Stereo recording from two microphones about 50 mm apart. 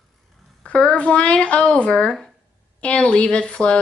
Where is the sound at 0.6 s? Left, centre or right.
Left.